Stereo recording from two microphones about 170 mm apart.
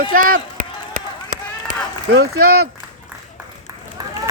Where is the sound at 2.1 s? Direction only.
65° right (ahead or behind).